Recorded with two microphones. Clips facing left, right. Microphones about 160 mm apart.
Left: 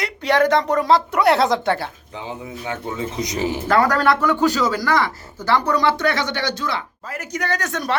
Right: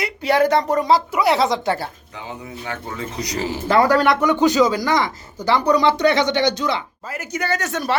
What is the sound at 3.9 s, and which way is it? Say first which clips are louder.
Speech: right 2 dB; 15° right (ahead or behind).